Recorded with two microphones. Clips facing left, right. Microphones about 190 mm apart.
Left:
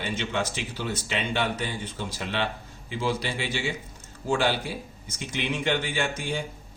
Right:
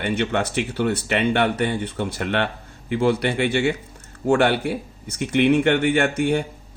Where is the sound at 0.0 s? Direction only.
60° right (ahead or behind).